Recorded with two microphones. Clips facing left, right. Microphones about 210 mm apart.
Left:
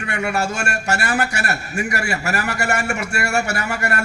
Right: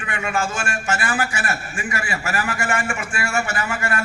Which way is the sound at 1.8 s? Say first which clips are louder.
Left 6 dB; 40° left (ahead or behind).